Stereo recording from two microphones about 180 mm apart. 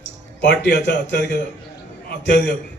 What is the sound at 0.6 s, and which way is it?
A man's voice, 80° left.